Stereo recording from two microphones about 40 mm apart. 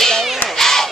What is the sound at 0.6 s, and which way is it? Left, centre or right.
Crowd, centre.